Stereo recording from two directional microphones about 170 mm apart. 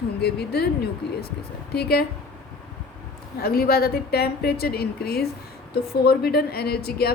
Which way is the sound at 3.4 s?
65° left (ahead or behind).